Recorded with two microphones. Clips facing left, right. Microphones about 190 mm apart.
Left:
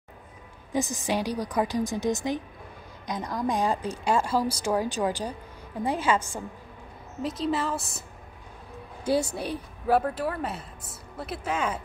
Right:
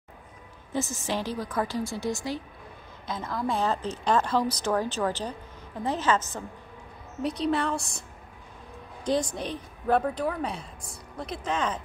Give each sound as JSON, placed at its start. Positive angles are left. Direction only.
{"t": 0.7, "sound": "a woman's voice", "side_deg": 15}
{"t": 9.0, "sound": "a woman's voice", "side_deg": 10}